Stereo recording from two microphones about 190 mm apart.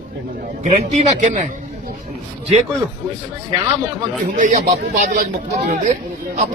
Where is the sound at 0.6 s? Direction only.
35° right (ahead or behind).